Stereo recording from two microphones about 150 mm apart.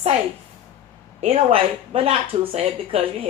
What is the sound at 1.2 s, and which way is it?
Speech, 40° right (ahead or behind).